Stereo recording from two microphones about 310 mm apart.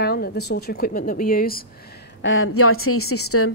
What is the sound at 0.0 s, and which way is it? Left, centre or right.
Speech, left.